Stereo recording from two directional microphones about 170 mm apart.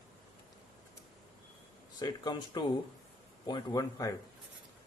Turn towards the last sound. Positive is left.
turn(degrees=20)  # may be behind; listen again after turning